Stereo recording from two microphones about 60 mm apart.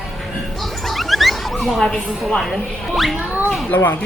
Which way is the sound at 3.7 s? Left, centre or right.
Left.